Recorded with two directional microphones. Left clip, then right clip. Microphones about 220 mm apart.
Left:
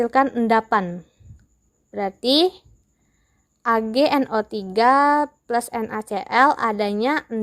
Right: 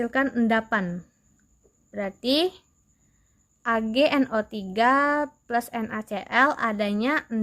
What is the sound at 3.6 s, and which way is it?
A woman's voice, 20° left (ahead or behind).